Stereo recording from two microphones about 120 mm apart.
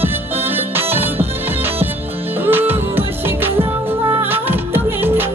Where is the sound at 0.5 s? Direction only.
20° right (ahead or behind).